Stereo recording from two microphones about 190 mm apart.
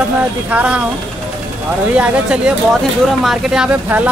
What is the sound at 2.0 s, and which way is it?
Speech, 5° right (ahead or behind).